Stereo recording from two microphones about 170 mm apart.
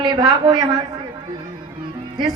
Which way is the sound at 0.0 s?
25° right (ahead or behind).